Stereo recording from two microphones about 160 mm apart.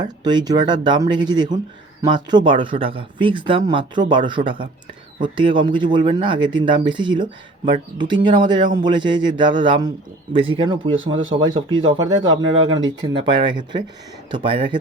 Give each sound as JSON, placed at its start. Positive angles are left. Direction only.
{"t": 0.0, "sound": "speech", "side_deg": -25}